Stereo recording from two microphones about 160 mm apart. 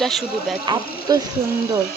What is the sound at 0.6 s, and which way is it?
Speech, 30° right (ahead or behind).